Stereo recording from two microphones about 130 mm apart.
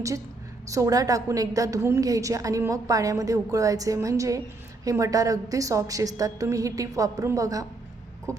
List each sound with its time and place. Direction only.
0.7 s a woman's voice: 25° right (ahead or behind)